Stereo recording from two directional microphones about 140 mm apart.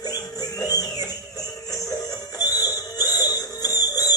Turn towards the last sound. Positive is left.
turn(degrees=25)  # may be behind; listen again after turning